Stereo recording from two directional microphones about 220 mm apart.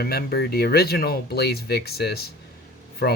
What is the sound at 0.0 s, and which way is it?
Speech, 45° left (ahead or behind).